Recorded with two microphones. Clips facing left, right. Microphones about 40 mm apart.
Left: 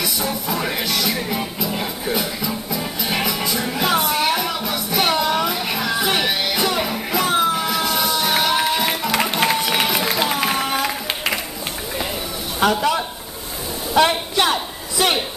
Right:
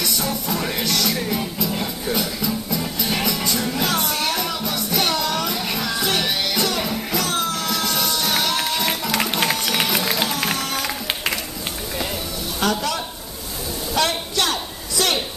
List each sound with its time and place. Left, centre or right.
0.0 s music: centre
12.5 s a man's voice: centre
13.9 s a sound: centre